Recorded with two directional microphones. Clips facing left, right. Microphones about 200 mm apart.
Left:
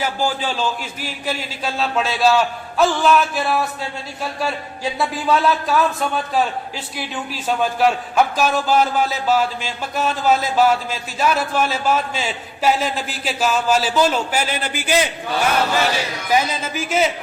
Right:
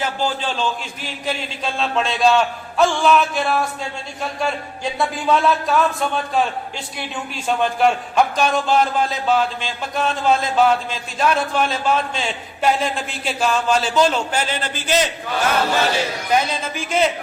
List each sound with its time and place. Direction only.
0.0 s a man's voice: 10° left (ahead or behind)
16.3 s a man's voice: 5° left (ahead or behind)